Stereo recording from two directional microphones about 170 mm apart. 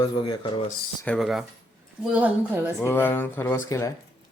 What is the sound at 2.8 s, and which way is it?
Speech, 15° left (ahead or behind).